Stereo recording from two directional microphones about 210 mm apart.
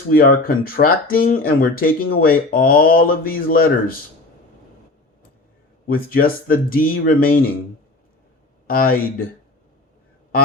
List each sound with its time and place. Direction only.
0.1 s speech: 45° left (ahead or behind)
5.9 s speech: 45° left (ahead or behind)
8.6 s speech: 45° left (ahead or behind)